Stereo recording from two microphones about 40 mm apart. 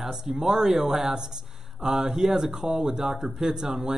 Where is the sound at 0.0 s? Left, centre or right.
Centre.